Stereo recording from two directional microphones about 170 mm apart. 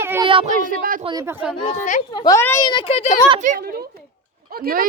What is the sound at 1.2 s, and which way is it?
Speech, 10° right (ahead or behind).